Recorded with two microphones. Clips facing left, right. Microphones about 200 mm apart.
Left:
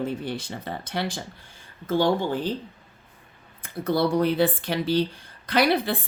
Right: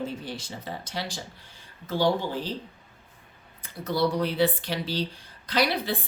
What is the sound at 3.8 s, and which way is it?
A woman's voice, 55° left (ahead or behind).